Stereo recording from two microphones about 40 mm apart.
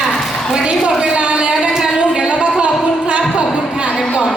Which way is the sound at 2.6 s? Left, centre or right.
Right.